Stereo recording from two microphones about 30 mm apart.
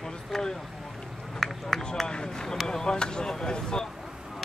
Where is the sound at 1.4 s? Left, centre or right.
Centre.